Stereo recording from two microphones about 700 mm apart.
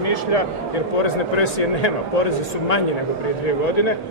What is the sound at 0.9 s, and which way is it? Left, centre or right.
A man's voice, left.